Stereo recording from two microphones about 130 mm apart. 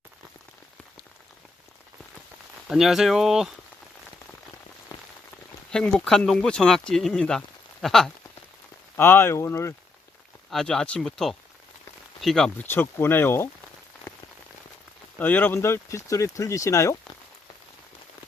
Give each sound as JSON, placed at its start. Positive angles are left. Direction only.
{"t": 2.6, "sound": "speech", "side_deg": 0}
{"t": 5.7, "sound": "speech", "side_deg": 5}
{"t": 9.0, "sound": "speech", "side_deg": 15}
{"t": 10.5, "sound": "speech", "side_deg": 5}
{"t": 12.6, "sound": "speech", "side_deg": 15}
{"t": 15.2, "sound": "speech", "side_deg": 15}